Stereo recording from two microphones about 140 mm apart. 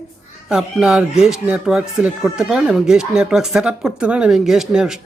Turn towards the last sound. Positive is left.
turn(degrees=-5)  # may be behind; listen again after turning